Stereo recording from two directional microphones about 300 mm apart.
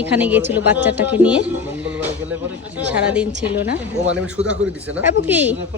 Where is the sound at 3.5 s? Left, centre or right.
Left.